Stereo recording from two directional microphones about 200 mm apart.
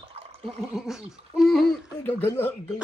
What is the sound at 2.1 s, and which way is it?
Speech, 10° left (ahead or behind).